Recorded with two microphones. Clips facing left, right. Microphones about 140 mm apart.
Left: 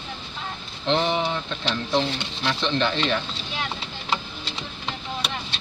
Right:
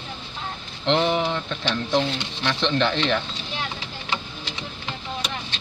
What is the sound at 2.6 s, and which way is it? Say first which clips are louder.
Speech: right 2 dB; 15° left (ahead or behind).